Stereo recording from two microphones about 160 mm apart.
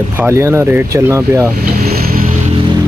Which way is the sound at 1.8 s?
70° right (ahead or behind).